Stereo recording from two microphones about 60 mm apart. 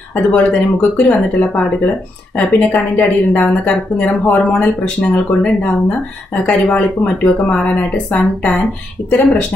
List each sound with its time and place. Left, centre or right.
0.3 s speech: left